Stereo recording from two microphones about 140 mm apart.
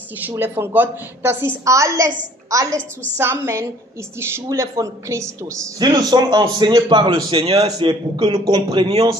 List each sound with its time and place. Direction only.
0.3 s a woman's voice: 15° right (ahead or behind); by 7.6 s 45° right (ahead or behind)
7.6 s a woman's voice: 30° right (ahead or behind)